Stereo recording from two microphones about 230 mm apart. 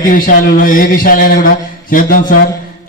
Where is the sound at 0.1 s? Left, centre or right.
Left.